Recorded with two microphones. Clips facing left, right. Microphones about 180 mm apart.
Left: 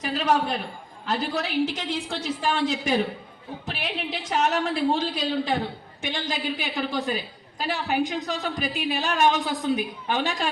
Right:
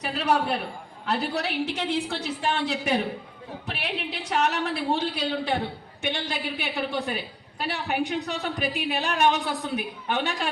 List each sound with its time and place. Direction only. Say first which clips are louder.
1.0 s a woman's voice: even; 65° right (ahead or behind)